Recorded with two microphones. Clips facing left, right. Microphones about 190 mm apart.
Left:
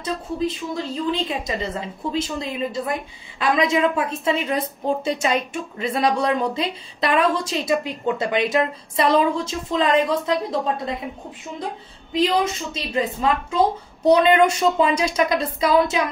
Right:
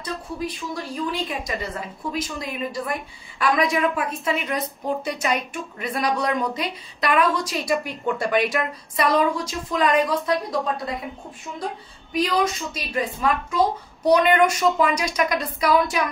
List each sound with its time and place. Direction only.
0.0 s a woman's voice: 25° left (ahead or behind)
12.1 s a woman's voice: 25° left (ahead or behind)